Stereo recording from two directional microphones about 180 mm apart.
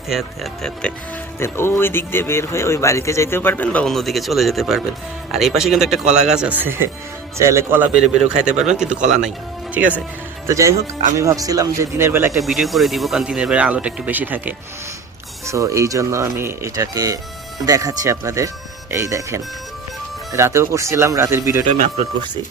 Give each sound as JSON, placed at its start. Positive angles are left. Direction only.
{"t": 0.1, "sound": "speech", "side_deg": 0}
{"t": 10.4, "sound": "speech", "side_deg": -15}
{"t": 12.3, "sound": "speech", "side_deg": 0}
{"t": 21.7, "sound": "speech", "side_deg": -40}